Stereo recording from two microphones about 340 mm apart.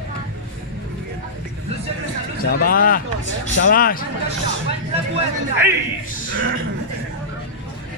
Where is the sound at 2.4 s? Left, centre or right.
Left.